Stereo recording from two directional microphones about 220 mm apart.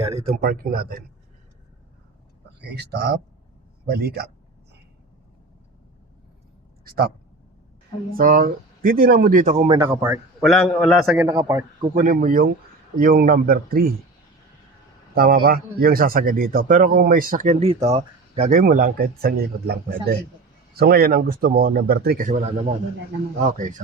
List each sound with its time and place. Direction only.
0.4 s speech: 40° right (ahead or behind)
2.6 s a man's voice: 50° right (ahead or behind)
6.8 s speech: 45° right (ahead or behind)
8.1 s speech: 40° right (ahead or behind)
9.6 s speech: 20° right (ahead or behind)
10.4 s a man's voice: centre (ahead or behind)
11.3 s speech: 15° right (ahead or behind)
11.9 s a man's voice: 35° right (ahead or behind)
15.1 s a man's voice: 40° right (ahead or behind)